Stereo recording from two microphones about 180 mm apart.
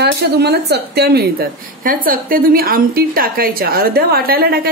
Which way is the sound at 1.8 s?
50° right (ahead or behind).